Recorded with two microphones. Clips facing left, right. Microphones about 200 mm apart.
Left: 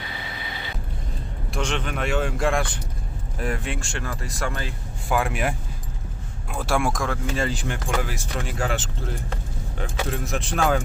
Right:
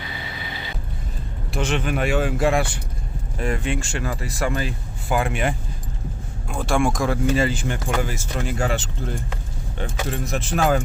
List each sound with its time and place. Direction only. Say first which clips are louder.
1.5 s speech: right 4 dB; 5° right (ahead or behind)